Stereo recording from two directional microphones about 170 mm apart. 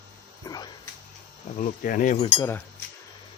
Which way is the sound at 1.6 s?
50° left (ahead or behind).